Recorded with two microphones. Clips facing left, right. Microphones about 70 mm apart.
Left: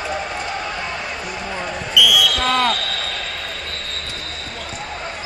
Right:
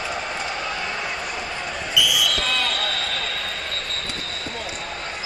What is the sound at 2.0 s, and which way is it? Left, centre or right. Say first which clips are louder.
Basketball bounce: left 6 dB; right.